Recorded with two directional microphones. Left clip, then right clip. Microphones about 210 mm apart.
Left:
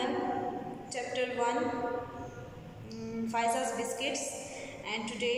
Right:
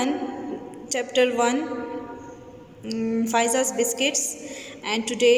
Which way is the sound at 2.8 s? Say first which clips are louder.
Right 13 dB; 50° right (ahead or behind).